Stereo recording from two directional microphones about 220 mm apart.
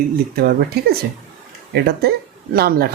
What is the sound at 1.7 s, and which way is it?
Speech, 45° right (ahead or behind).